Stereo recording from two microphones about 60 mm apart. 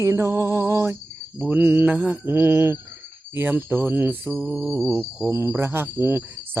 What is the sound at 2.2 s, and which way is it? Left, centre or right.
Speech, right.